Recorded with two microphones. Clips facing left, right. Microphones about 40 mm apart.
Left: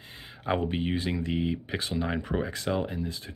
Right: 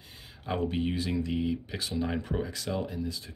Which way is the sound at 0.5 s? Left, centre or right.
Left.